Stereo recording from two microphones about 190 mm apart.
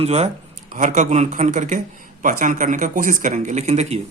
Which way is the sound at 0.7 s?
45° right (ahead or behind).